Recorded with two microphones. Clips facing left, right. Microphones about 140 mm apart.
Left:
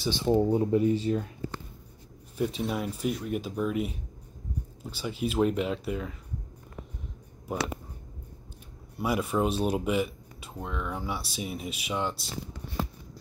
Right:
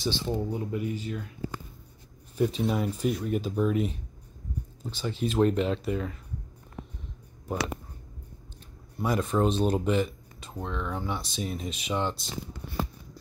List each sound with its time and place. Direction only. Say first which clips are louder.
0.2 s speech: left 7 dB; 30° left (ahead or behind)
2.3 s speech: right 3 dB; centre (ahead or behind)
8.9 s speech: right 1 dB; 10° left (ahead or behind)